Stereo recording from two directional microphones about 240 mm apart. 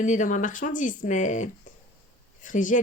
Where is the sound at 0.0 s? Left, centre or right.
Left.